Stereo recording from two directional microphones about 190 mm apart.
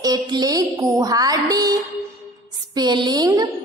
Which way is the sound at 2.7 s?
25° right (ahead or behind).